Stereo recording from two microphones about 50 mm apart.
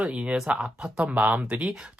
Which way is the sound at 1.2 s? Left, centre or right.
Right.